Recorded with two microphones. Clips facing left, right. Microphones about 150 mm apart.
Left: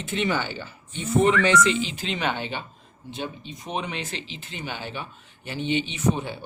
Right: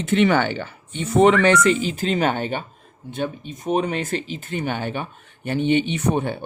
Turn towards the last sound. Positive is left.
turn(degrees=-55)  # may be behind; listen again after turning